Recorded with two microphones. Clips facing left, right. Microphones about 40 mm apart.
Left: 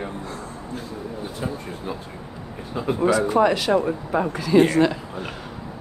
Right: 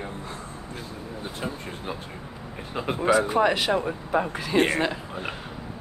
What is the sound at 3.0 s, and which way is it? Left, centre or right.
Speech, right.